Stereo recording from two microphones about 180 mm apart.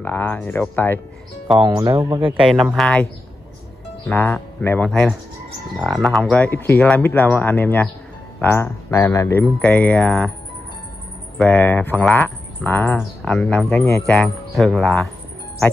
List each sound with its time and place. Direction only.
0.0 s speech: 10° left (ahead or behind)
1.6 s speech: 25° right (ahead or behind)
2.5 s speech: centre (ahead or behind)
4.1 s speech: 10° left (ahead or behind)
11.3 s speech: 5° left (ahead or behind)